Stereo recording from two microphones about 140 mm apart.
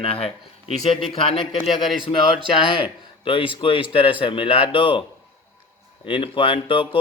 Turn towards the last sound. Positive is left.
turn(degrees=40)  # may be behind; listen again after turning